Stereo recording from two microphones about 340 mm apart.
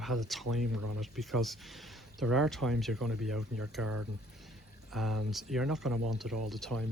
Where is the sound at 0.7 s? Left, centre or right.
Right.